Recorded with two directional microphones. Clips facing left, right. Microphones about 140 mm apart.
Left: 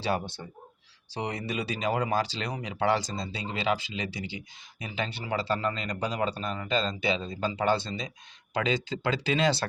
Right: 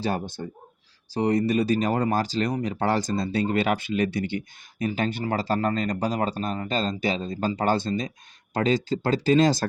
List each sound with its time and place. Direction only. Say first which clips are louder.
0.0 s speech: right 2 dB; 45° right (ahead or behind)